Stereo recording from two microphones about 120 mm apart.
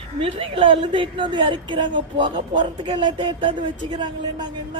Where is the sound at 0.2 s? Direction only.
50° right (ahead or behind).